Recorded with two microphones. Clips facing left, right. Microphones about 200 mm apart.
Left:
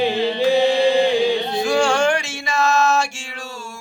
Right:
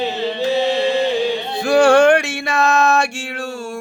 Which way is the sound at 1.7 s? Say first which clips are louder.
Right 8 dB; 60° right (ahead or behind).